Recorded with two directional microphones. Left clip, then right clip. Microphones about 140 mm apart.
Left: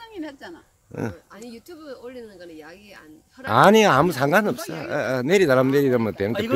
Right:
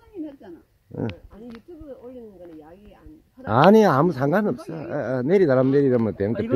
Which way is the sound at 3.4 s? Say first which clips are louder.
Left 1 dB; 20° left (ahead or behind).